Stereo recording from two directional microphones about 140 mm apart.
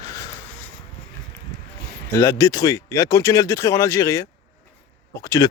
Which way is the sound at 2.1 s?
25° left (ahead or behind).